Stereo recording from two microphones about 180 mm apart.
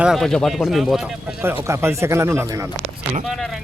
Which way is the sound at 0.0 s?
Centre (ahead or behind).